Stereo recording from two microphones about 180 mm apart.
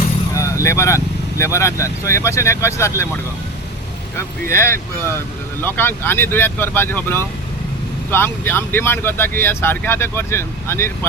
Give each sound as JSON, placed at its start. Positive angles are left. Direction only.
{"t": 0.3, "sound": "speech", "side_deg": 15}
{"t": 4.4, "sound": "speech", "side_deg": 15}